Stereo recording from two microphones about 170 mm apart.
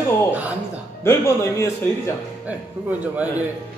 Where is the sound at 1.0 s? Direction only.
15° left (ahead or behind).